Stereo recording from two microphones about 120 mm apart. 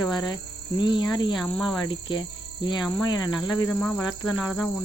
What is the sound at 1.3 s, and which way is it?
Speech, centre (ahead or behind).